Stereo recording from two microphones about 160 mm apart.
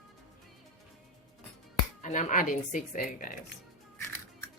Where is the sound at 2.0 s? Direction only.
50° left (ahead or behind).